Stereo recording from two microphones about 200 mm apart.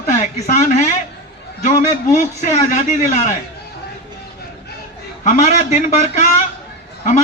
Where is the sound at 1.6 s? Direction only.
35° left (ahead or behind).